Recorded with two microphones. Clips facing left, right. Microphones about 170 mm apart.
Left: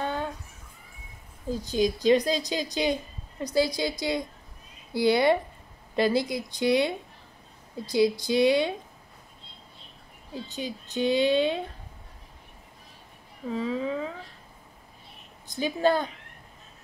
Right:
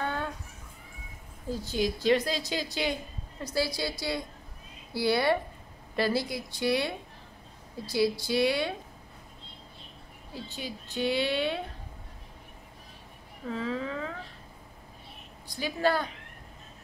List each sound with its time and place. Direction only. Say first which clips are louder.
0.0 s a sound: left 2 dB; 15° left (ahead or behind)
1.5 s a woman's voice: left 4 dB; 15° left (ahead or behind)
10.5 s speech: left 5 dB; 20° left (ahead or behind)
13.5 s a woman's voice: left 4 dB; 15° left (ahead or behind)
15.4 s speech: left 4 dB; 20° left (ahead or behind)